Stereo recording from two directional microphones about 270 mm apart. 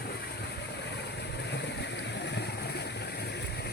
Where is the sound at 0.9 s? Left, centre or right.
Left.